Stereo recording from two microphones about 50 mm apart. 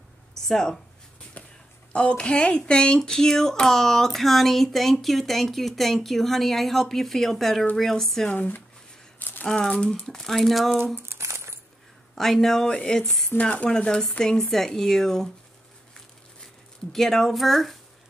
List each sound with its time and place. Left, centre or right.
0.5 s speech: centre
1.9 s speech: left; by 8.3 s centre
8.3 s speech: left
9.2 s a sound: left
9.5 s speech: centre
11.0 s a sound: right
12.2 s speech: centre
13.4 s speech: left; by 15.2 s centre
16.9 s speech: centre